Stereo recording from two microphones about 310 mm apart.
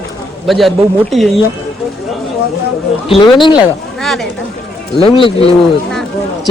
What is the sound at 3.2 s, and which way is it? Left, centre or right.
Speech, centre.